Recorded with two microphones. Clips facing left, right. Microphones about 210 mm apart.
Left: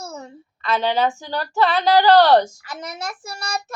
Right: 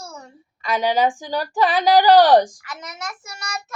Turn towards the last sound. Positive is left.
turn(degrees=35)  # may be behind; listen again after turning